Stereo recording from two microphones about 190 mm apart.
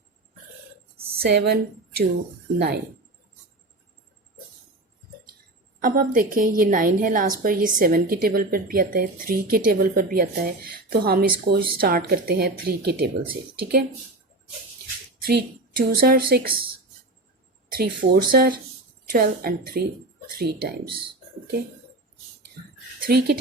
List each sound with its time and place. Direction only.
1.2 s a woman's voice: 55° right (ahead or behind)
5.8 s a woman's voice: 45° right (ahead or behind)
15.3 s a woman's voice: 55° right (ahead or behind)
17.7 s a woman's voice: 50° right (ahead or behind)
23.0 s a sound: 50° right (ahead or behind)